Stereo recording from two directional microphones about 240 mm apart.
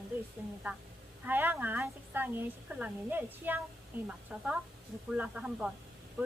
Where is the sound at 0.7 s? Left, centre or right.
Centre.